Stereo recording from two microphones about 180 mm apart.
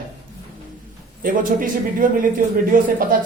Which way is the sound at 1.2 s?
50° right (ahead or behind).